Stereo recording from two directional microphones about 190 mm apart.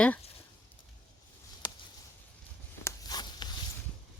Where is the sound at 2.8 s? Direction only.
20° left (ahead or behind).